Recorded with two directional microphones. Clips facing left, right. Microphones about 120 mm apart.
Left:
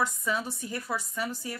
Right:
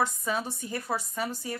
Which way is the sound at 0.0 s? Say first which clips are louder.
Right 1 dB; 35° right (ahead or behind).